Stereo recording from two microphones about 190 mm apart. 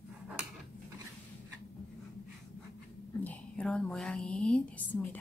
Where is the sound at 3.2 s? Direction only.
5° left (ahead or behind).